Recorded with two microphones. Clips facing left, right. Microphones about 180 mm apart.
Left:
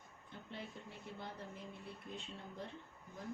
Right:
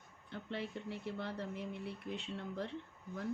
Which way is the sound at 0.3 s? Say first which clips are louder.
Right 7 dB; 75° right (ahead or behind).